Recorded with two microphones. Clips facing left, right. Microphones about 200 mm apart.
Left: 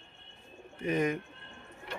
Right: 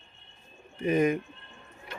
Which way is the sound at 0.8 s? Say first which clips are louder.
Right 5 dB; 10° right (ahead or behind).